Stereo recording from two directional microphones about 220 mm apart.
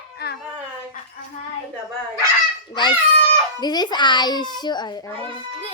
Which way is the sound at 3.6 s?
20° left (ahead or behind).